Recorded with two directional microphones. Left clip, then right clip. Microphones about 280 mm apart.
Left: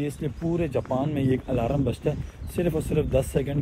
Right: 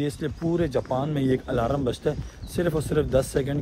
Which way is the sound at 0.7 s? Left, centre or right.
Centre.